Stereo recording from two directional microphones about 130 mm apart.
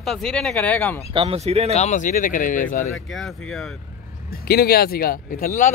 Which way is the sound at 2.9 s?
Centre (ahead or behind).